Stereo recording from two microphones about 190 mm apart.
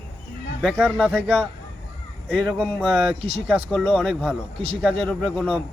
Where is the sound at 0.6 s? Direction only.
5° left (ahead or behind).